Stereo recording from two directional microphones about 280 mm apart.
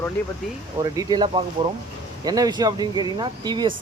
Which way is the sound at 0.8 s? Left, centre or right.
Centre.